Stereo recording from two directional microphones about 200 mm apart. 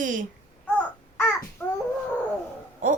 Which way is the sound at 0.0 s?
40° right (ahead or behind).